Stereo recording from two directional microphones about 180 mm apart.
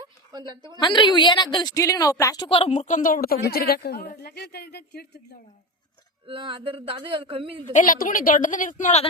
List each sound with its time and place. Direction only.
0.0 s a sound: 25° right (ahead or behind)
0.8 s a woman's voice: 25° left (ahead or behind); by 5.2 s 65° left (ahead or behind)
6.2 s a woman's voice: 30° right (ahead or behind)
7.7 s a woman's voice: 45° left (ahead or behind)